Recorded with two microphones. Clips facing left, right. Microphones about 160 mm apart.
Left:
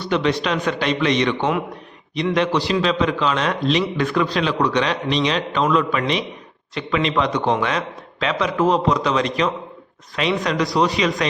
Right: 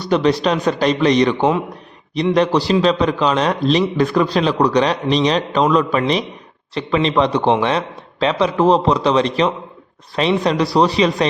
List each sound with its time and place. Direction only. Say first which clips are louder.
0.0 s a man's voice: right 5 dB; 40° right (ahead or behind)